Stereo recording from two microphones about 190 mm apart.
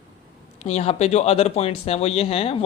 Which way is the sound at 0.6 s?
35° left (ahead or behind).